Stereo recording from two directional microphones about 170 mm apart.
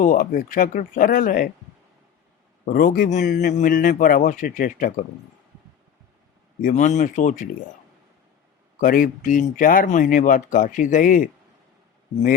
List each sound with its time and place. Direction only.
0.0 s speech: 50° left (ahead or behind)
2.6 s speech: 55° left (ahead or behind)
6.6 s speech: 50° left (ahead or behind)
8.8 s speech: 55° left (ahead or behind)